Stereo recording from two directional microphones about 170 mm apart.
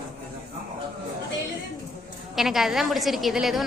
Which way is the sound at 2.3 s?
Centre (ahead or behind).